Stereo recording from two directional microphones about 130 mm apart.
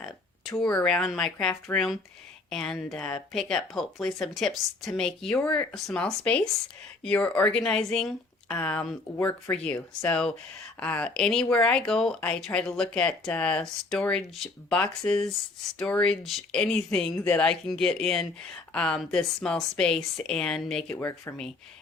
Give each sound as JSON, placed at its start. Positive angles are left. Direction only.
{"t": 0.6, "sound": "a woman's voice", "side_deg": 5}
{"t": 20.9, "sound": "speech", "side_deg": 15}